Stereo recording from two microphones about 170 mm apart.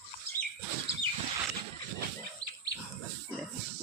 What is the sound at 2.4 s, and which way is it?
Wild animals, 25° right (ahead or behind).